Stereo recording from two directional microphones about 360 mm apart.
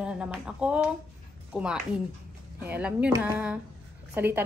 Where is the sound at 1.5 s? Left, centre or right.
Centre.